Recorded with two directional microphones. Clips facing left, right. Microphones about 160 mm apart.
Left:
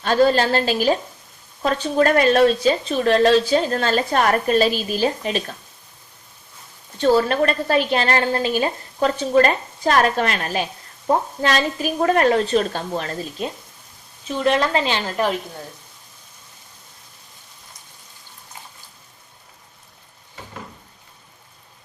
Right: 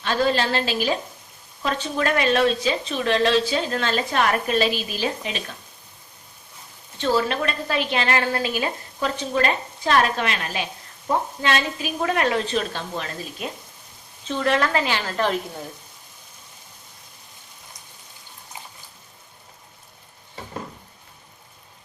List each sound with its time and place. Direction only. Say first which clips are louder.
0.0 s a woman's voice: left 5 dB; 40° left (ahead or behind)
7.0 s a woman's voice: left 5 dB; 40° left (ahead or behind)
13.4 s speech: left 4 dB; 30° left (ahead or behind)
14.3 s speech: left 2 dB; 20° left (ahead or behind)